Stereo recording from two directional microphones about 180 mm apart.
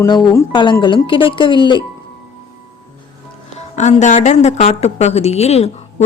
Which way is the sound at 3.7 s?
40° left (ahead or behind).